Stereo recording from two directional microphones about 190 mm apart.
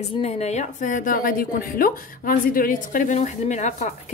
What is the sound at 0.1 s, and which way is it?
A woman's voice, 35° left (ahead or behind).